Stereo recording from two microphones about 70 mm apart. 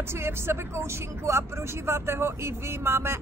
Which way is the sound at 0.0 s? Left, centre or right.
Right.